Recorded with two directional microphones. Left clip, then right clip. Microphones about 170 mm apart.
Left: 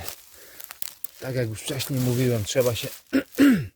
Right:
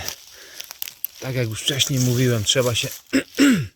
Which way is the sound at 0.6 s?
30° left (ahead or behind).